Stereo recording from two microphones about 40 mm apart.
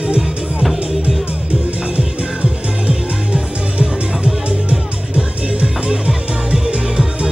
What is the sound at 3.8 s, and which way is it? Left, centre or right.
Music, right.